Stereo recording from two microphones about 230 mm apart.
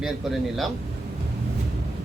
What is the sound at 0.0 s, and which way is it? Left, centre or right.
Speech, centre.